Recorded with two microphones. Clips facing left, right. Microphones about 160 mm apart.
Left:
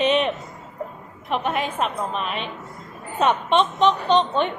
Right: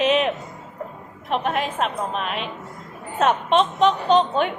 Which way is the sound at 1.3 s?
Centre (ahead or behind).